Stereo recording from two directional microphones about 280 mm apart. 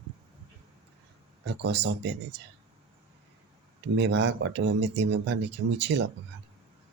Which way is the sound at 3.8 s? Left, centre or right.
Right.